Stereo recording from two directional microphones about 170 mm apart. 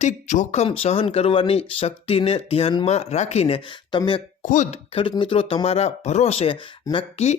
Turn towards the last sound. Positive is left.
turn(degrees=35)  # may be behind; listen again after turning